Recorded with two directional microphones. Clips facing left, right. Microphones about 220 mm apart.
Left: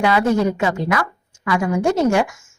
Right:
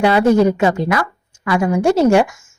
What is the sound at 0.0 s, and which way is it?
Speech, 30° right (ahead or behind).